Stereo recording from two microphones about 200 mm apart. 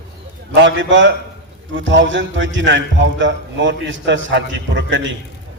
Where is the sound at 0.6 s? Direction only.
65° right (ahead or behind).